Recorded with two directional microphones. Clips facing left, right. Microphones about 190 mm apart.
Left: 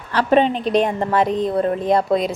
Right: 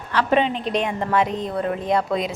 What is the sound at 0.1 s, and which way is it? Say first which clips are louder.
A woman's voice: left 4 dB; 40° left (ahead or behind).